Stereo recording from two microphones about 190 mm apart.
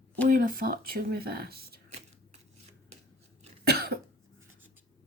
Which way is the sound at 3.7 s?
55° right (ahead or behind).